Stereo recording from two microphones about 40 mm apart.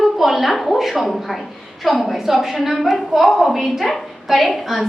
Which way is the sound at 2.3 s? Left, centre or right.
Centre.